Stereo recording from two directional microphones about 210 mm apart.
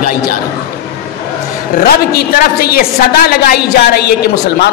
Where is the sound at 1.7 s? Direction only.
45° left (ahead or behind).